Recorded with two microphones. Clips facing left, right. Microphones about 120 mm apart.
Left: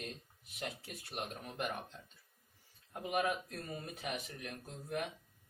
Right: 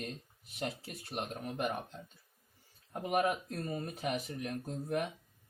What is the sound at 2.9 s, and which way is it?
Speech, 45° right (ahead or behind).